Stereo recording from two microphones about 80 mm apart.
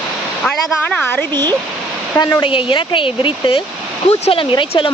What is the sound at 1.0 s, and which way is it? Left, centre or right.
Speech, left.